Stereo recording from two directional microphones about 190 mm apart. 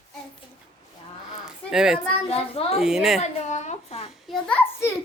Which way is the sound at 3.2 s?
40° left (ahead or behind).